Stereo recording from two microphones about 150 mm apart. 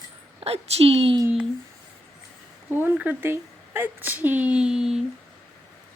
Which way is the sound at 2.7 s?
10° right (ahead or behind).